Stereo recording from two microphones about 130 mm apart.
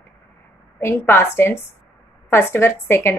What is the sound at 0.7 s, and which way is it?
A woman's voice, 20° left (ahead or behind).